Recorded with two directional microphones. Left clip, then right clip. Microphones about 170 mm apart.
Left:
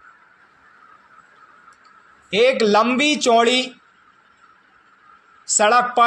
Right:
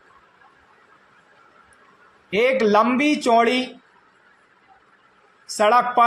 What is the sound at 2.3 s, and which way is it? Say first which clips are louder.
Speech: left 2 dB; 40° left (ahead or behind).